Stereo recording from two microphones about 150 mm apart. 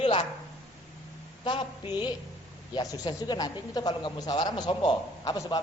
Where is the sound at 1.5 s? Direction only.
35° left (ahead or behind).